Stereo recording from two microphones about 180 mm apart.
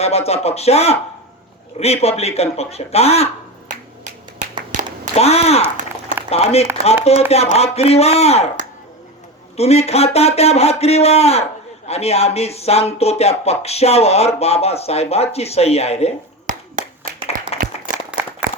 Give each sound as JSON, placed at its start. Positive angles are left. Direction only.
{"t": 0.0, "sound": "speech", "side_deg": 35}
{"t": 4.4, "sound": "a sound", "side_deg": -45}
{"t": 5.1, "sound": "speech", "side_deg": 35}
{"t": 9.6, "sound": "speech", "side_deg": 35}
{"t": 16.5, "sound": "clapping", "side_deg": -45}
{"t": 17.9, "sound": "a sound", "side_deg": -10}